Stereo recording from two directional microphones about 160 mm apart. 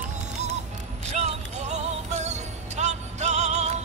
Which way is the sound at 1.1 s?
45° right (ahead or behind).